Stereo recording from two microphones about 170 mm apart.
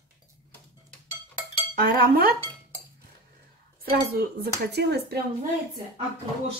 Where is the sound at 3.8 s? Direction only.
60° right (ahead or behind).